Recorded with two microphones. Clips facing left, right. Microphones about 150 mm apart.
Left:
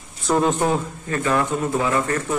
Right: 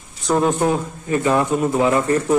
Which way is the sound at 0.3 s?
10° right (ahead or behind).